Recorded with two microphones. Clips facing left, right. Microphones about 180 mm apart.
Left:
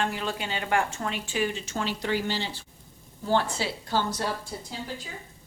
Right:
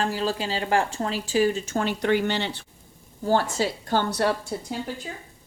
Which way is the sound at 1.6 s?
50° right (ahead or behind).